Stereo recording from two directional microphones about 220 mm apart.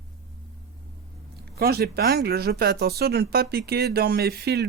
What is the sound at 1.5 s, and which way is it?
Speech, 45° right (ahead or behind).